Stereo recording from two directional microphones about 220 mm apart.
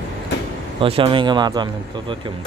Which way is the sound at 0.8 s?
25° right (ahead or behind).